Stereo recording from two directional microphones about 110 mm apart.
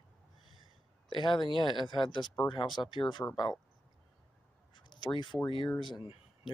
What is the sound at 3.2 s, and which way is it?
Speech, 20° left (ahead or behind).